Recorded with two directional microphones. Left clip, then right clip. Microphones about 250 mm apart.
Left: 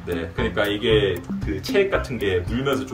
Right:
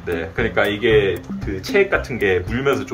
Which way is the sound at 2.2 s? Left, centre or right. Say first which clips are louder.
Right 5 dB; centre.